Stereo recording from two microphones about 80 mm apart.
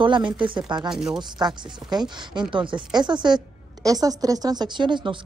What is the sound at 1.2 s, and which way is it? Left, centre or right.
Speech, right.